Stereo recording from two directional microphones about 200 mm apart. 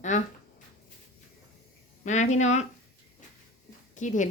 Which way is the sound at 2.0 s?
35° left (ahead or behind).